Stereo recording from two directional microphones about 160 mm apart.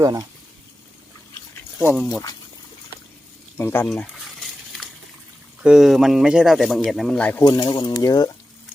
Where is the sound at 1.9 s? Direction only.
Centre (ahead or behind).